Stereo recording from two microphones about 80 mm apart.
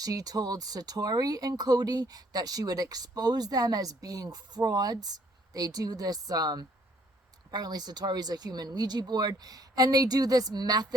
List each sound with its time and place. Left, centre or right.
0.0 s speech: right